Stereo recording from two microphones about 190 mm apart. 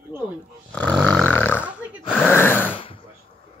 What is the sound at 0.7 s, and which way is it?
Snoring, 5° left (ahead or behind).